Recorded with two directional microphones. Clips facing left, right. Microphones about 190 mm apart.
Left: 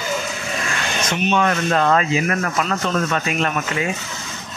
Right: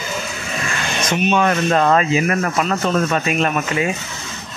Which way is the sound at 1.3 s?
25° right (ahead or behind).